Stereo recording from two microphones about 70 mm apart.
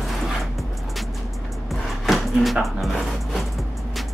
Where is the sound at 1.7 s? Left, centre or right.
Centre.